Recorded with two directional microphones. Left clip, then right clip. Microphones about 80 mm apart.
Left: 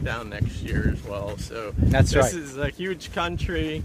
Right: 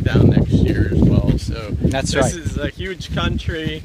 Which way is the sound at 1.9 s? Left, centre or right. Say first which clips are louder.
Right 2 dB; right.